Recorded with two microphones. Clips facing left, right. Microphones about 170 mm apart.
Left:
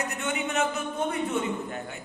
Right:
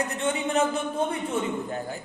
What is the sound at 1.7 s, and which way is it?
Speech, 35° right (ahead or behind).